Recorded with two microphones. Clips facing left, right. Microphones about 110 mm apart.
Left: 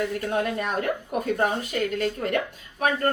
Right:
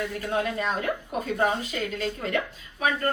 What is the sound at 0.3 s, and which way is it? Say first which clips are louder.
A woman's voice: even; 50° left (ahead or behind).